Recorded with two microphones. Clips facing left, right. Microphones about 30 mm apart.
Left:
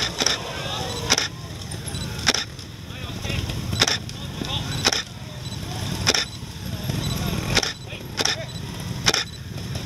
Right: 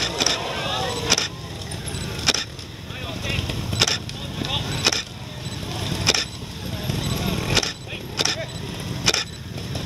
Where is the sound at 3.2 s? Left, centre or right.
Centre.